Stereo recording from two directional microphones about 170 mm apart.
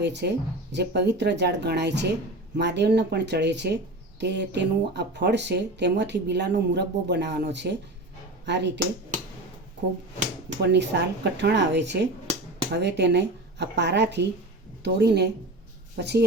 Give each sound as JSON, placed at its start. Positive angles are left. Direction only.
{"t": 0.0, "sound": "speech", "side_deg": -90}
{"t": 10.6, "sound": "speech", "side_deg": -90}